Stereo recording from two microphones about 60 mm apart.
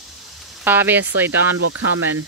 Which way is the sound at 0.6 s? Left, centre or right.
Right.